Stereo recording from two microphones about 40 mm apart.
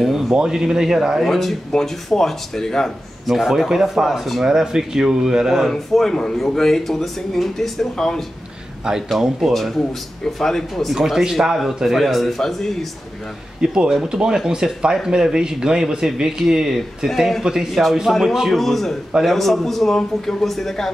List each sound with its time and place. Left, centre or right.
0.0 s a sound: centre
0.4 s speech: centre
1.2 s a man's voice: centre
3.3 s speech: centre
5.7 s speech: centre
9.5 s a man's voice: centre
13.6 s speech: centre
17.6 s a man's voice: centre